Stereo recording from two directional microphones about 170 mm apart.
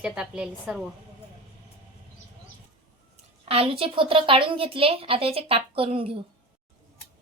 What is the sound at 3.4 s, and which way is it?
A woman's voice, 35° right (ahead or behind).